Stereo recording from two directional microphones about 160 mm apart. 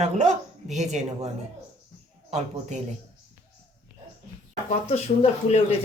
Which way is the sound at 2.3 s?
45° right (ahead or behind).